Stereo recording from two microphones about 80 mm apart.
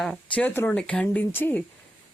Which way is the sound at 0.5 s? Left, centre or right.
Left.